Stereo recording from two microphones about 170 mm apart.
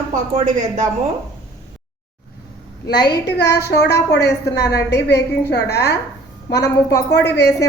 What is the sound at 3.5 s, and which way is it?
A woman's voice, 75° left (ahead or behind).